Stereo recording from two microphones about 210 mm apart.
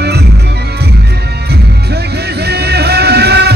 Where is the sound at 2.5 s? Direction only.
50° right (ahead or behind).